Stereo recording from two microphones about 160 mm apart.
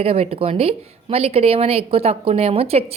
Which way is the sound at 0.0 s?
40° right (ahead or behind).